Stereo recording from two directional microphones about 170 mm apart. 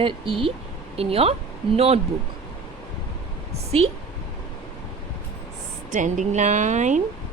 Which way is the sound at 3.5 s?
35° right (ahead or behind).